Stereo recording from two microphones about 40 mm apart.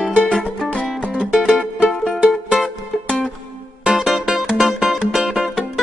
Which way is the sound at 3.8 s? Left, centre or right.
Centre.